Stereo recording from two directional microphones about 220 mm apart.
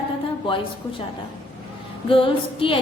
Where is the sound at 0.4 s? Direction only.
25° left (ahead or behind).